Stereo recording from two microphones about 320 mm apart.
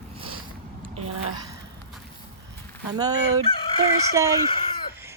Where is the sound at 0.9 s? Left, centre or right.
Right.